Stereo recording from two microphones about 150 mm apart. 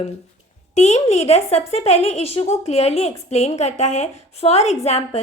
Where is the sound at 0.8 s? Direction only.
45° left (ahead or behind).